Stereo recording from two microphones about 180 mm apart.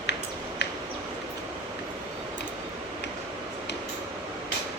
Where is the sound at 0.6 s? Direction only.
70° left (ahead or behind).